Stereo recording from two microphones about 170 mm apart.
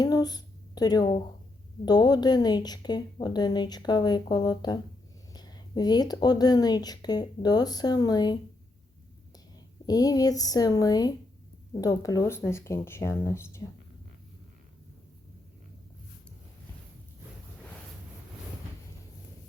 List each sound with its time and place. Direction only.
0.0 s a sound: 25° left (ahead or behind)
1.8 s speech: 25° left (ahead or behind)
9.8 s speech: 20° left (ahead or behind)